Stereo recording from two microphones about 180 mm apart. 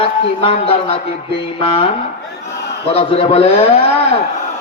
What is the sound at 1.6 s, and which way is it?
Speech, 30° left (ahead or behind).